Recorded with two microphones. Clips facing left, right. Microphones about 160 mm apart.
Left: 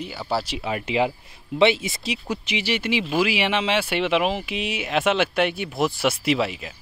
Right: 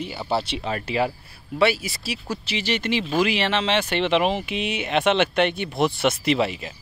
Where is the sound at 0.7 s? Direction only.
15° left (ahead or behind).